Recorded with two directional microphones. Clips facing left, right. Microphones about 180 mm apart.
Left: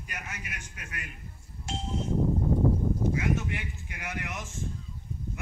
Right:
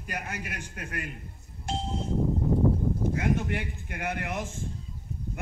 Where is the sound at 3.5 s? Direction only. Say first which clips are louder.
Right 4 dB; 55° right (ahead or behind).